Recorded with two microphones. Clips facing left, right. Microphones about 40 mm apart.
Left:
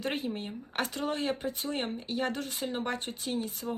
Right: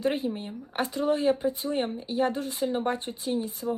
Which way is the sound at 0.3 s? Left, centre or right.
Centre.